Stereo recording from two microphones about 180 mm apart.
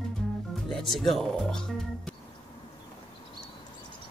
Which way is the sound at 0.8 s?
Centre (ahead or behind).